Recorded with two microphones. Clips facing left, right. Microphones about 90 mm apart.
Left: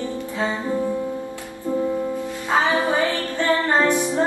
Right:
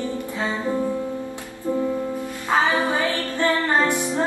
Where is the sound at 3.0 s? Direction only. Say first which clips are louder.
Left 1 dB; 20° left (ahead or behind).